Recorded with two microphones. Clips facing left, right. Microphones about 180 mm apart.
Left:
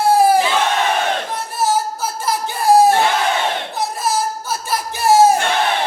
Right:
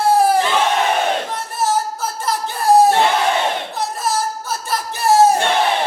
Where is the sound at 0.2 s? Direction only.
5° left (ahead or behind).